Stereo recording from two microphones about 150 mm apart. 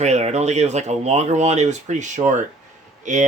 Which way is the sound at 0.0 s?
50° right (ahead or behind).